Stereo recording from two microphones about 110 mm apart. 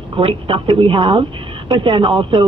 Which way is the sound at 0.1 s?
55° right (ahead or behind).